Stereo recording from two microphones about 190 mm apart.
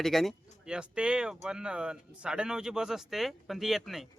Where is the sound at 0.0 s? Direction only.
Centre (ahead or behind).